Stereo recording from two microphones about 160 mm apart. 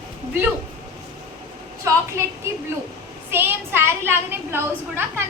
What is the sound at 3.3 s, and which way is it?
A woman's voice, 15° right (ahead or behind).